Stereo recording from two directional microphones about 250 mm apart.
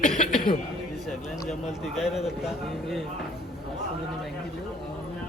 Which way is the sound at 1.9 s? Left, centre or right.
Centre.